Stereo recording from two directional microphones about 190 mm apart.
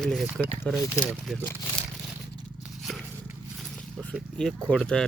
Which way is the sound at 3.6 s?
Centre (ahead or behind).